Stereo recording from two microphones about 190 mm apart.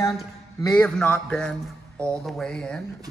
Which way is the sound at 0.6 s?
20° left (ahead or behind).